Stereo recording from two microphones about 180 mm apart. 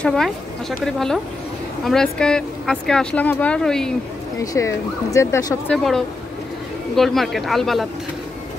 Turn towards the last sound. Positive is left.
turn(degrees=0)  # may be behind; listen again after turning